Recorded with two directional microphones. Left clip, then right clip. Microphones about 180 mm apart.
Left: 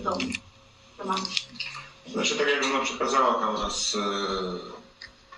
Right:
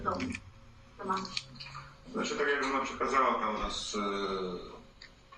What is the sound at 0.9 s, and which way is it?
A man's voice, 35° left (ahead or behind).